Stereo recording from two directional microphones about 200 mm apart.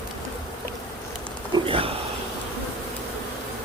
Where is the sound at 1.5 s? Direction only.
25° right (ahead or behind).